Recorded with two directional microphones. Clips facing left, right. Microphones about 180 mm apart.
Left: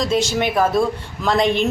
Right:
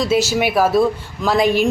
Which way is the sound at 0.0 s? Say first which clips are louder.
Right 2 dB; 5° right (ahead or behind).